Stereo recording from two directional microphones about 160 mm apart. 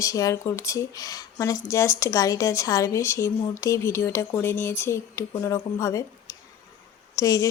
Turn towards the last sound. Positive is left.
turn(degrees=20)  # may be behind; listen again after turning